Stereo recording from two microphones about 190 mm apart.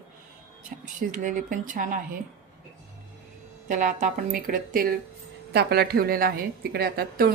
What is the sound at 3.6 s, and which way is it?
A woman's voice, 40° right (ahead or behind).